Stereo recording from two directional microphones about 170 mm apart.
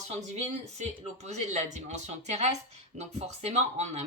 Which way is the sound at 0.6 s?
40° right (ahead or behind).